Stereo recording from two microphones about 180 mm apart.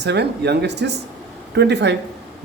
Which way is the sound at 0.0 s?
70° right (ahead or behind).